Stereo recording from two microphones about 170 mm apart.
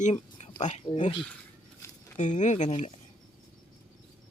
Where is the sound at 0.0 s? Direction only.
40° left (ahead or behind).